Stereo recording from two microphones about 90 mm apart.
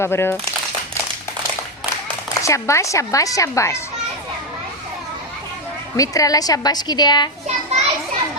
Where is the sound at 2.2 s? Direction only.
35° left (ahead or behind).